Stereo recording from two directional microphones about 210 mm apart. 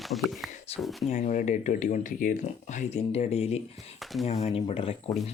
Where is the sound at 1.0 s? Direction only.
35° left (ahead or behind).